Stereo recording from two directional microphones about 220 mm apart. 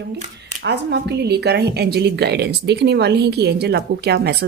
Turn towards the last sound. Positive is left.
turn(degrees=-50)  # may be behind; listen again after turning